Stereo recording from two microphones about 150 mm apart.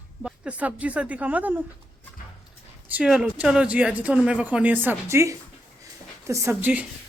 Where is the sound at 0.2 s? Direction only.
5° right (ahead or behind).